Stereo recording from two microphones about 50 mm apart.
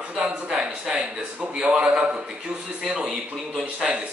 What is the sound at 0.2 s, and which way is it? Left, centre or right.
Speech, centre.